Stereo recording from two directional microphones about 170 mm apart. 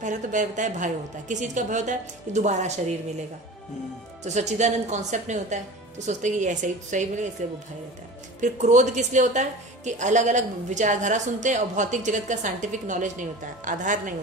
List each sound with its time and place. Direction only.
0.0 s a woman's voice: 45° right (ahead or behind)
4.2 s a woman's voice: 40° right (ahead or behind)